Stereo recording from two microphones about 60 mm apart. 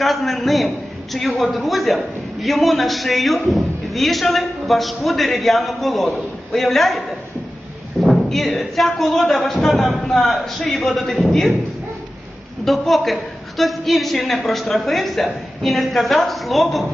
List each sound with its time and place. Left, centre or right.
0.0 s a man's voice: centre
8.0 s a man's voice: centre
12.6 s a man's voice: centre